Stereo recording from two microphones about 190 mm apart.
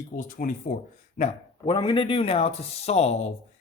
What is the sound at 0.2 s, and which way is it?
Speech, 45° left (ahead or behind).